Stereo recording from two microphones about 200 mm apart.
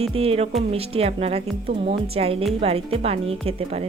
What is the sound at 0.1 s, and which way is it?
Speech, 30° right (ahead or behind).